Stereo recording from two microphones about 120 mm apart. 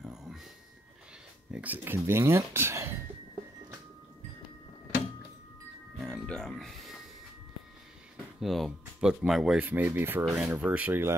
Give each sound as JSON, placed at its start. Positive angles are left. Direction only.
{"t": 0.0, "sound": "a sound", "side_deg": -5}
{"t": 1.5, "sound": "speech", "side_deg": -15}
{"t": 5.9, "sound": "music", "side_deg": 5}
{"t": 8.4, "sound": "speech", "side_deg": 0}